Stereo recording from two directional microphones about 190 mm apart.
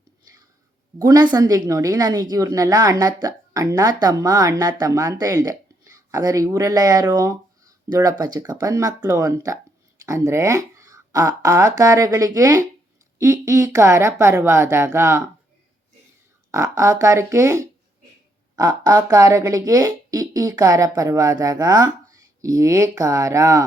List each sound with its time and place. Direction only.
0.9 s speech: 20° right (ahead or behind)
16.5 s speech: 15° right (ahead or behind)